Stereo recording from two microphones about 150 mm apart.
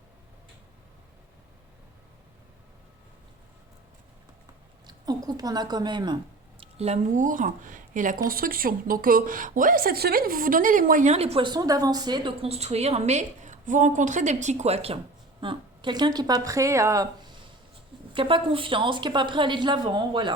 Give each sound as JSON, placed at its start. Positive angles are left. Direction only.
{"t": 4.9, "sound": "speech", "side_deg": -25}
{"t": 6.6, "sound": "a woman's voice", "side_deg": -45}
{"t": 8.3, "sound": "a woman's voice", "side_deg": -75}
{"t": 15.4, "sound": "speech", "side_deg": -35}
{"t": 18.1, "sound": "a woman's voice", "side_deg": -35}